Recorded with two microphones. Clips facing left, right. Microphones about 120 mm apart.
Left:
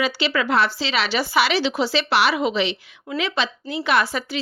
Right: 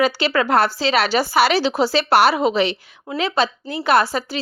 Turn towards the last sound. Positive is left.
turn(degrees=-35)  # may be behind; listen again after turning